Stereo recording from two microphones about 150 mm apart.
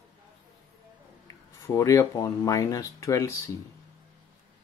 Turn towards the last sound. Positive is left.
turn(degrees=20)  # may be behind; listen again after turning